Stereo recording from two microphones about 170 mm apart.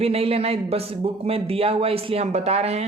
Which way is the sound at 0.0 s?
35° right (ahead or behind).